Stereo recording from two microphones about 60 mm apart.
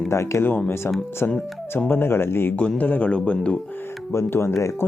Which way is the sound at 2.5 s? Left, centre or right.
Left.